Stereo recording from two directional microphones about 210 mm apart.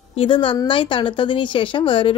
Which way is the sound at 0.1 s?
25° left (ahead or behind).